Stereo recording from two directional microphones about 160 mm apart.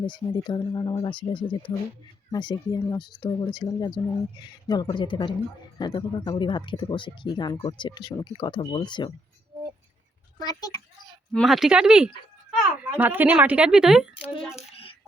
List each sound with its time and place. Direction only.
0.0 s speech: 30° left (ahead or behind)
10.4 s speech: 25° left (ahead or behind)
11.3 s a woman's voice: centre (ahead or behind)
14.3 s a sound: 35° left (ahead or behind)